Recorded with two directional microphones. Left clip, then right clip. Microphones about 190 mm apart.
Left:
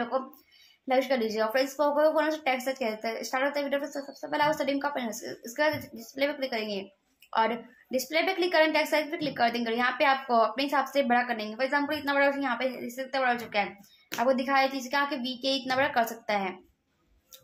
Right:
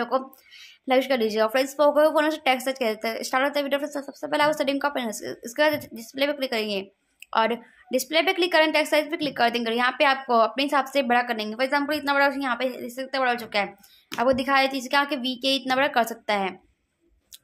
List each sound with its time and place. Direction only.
0.8 s a woman's voice: 35° right (ahead or behind)